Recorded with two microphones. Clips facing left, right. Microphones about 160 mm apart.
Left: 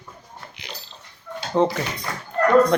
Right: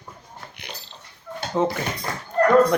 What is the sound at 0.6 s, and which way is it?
Dog, 60° right (ahead or behind).